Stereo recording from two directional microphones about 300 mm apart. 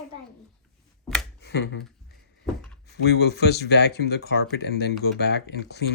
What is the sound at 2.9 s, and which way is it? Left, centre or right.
Speech, left.